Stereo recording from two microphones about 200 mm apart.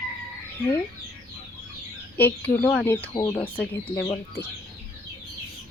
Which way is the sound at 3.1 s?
20° left (ahead or behind).